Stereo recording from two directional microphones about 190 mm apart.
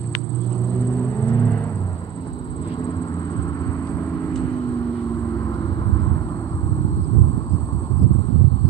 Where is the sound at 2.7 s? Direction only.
25° left (ahead or behind).